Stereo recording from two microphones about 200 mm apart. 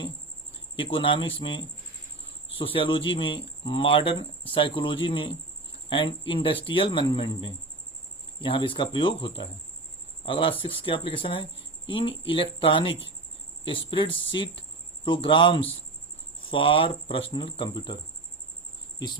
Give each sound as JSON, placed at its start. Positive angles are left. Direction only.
{"t": 0.8, "sound": "speech", "side_deg": 25}